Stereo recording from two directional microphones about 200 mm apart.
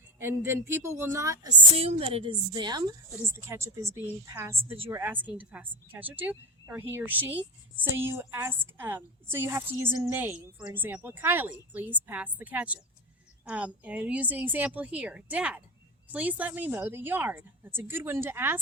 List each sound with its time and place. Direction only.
0.2 s a woman's voice: 10° right (ahead or behind)
1.7 s a woman's voice: 30° right (ahead or behind); by 4.5 s 15° right (ahead or behind)
4.5 s a woman's voice: 25° right (ahead or behind)
4.9 s a woman's voice: 10° right (ahead or behind)